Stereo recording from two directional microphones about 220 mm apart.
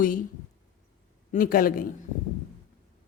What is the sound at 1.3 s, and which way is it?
Speech, 40° left (ahead or behind).